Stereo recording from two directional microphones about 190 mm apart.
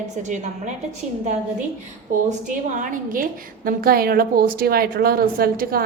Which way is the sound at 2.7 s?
45° right (ahead or behind).